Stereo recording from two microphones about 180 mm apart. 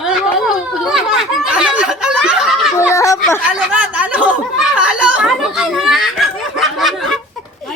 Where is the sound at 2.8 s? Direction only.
15° left (ahead or behind).